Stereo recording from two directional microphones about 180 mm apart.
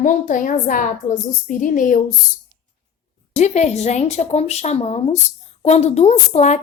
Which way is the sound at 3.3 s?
40° left (ahead or behind).